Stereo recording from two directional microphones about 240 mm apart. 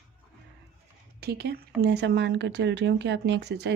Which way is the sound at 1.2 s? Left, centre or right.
Right.